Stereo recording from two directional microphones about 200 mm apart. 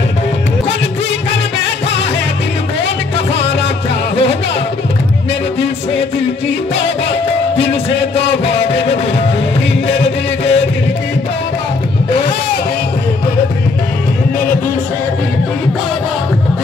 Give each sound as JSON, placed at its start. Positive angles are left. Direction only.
{"t": 7.5, "sound": "music", "side_deg": 60}
{"t": 9.8, "sound": "music", "side_deg": 60}